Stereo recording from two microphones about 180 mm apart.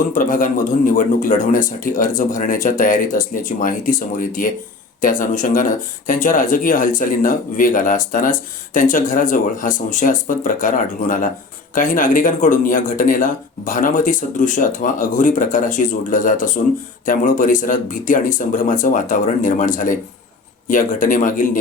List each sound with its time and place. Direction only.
0.1 s speech: 50° left (ahead or behind)